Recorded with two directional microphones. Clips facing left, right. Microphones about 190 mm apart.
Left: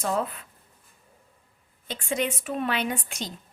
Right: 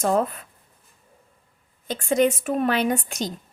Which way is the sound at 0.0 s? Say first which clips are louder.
Right 6 dB; 45° right (ahead or behind).